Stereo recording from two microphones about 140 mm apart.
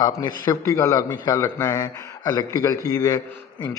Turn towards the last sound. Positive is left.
turn(degrees=30)  # may be behind; listen again after turning